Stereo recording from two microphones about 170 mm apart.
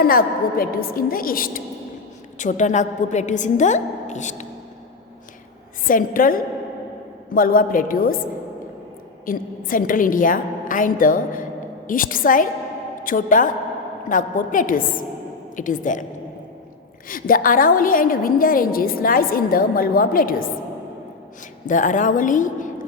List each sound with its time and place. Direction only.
0.0 s a woman's voice: 60° left (ahead or behind)
2.4 s a woman's voice: 45° left (ahead or behind)
5.8 s a woman's voice: 55° left (ahead or behind)
9.2 s a woman's voice: 55° left (ahead or behind)
17.1 s a woman's voice: 55° left (ahead or behind)
21.7 s a woman's voice: 50° left (ahead or behind)